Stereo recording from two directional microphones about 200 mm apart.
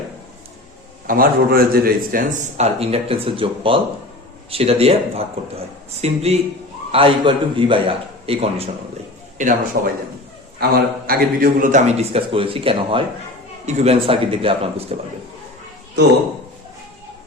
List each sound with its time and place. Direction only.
1.0 s a man's voice: 45° right (ahead or behind)
2.6 s a man's voice: 30° right (ahead or behind)
9.7 s a man's voice: 50° right (ahead or behind); by 14.9 s 30° right (ahead or behind)